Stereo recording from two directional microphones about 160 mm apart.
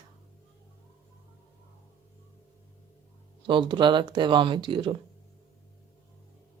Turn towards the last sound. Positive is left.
turn(degrees=-30)  # may be behind; listen again after turning